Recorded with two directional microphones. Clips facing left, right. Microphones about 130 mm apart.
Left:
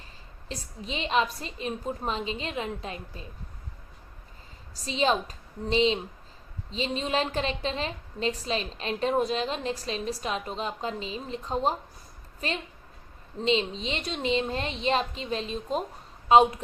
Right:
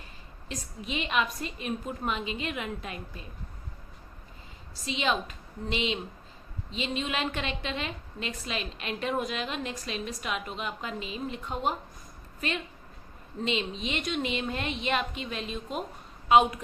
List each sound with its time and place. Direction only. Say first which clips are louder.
0.4 s a woman's voice: even; 30° left (ahead or behind)
4.7 s a woman's voice: left 4 dB; 35° left (ahead or behind)